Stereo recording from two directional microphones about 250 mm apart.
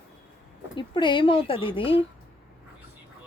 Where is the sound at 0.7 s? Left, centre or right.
Centre.